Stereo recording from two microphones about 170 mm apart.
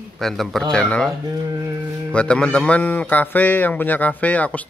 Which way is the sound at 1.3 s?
20° right (ahead or behind).